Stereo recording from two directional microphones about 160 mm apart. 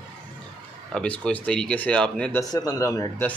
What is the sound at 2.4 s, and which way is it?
Speech, 20° left (ahead or behind).